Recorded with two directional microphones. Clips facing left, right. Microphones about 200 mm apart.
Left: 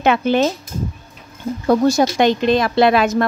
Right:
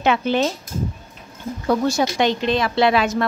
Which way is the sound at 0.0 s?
50° left (ahead or behind).